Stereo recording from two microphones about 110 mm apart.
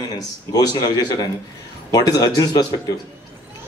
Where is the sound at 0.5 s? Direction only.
35° left (ahead or behind).